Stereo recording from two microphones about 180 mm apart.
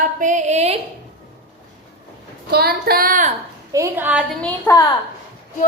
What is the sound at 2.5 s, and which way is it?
Speech, 60° right (ahead or behind).